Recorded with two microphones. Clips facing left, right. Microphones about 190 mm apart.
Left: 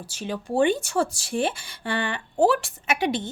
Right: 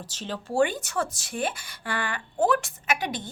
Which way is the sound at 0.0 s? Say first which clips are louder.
Left 3 dB; 10° left (ahead or behind).